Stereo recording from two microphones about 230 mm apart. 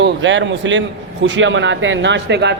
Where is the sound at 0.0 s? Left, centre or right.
Right.